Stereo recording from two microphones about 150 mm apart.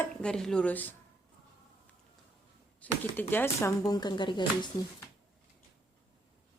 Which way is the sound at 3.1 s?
15° left (ahead or behind).